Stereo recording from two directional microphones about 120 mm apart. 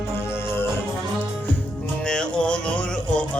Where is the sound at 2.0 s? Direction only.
5° left (ahead or behind).